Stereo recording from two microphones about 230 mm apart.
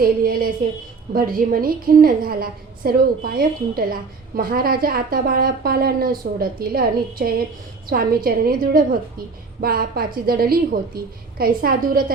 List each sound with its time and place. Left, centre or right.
0.0 s a woman's voice: right